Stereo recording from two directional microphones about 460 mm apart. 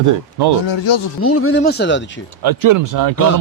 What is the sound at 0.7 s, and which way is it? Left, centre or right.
Speech, left.